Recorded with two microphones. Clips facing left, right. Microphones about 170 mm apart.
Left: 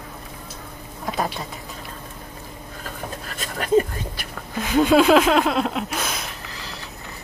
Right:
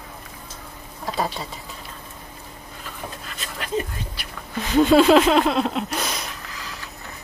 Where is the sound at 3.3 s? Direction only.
45° left (ahead or behind).